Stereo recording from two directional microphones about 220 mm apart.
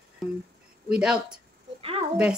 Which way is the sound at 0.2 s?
Centre (ahead or behind).